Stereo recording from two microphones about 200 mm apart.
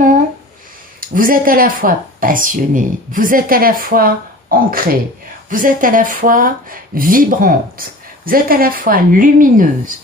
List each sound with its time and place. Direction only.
1.0 s speech: 45° right (ahead or behind)